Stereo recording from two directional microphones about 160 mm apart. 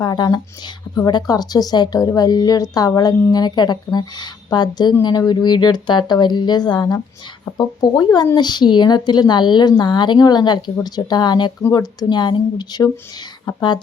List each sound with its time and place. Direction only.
0.0 s speech: 25° left (ahead or behind)